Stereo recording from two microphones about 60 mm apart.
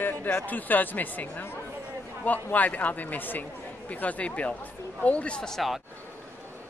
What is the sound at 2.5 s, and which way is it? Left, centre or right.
Speech, left.